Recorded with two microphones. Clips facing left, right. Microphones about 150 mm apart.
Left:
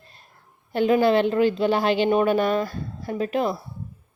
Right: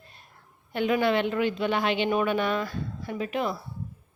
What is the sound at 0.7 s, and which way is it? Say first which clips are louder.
A woman's voice: left 6 dB; 35° left (ahead or behind).